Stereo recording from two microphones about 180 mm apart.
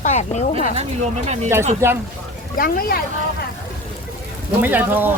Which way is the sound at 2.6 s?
55° left (ahead or behind).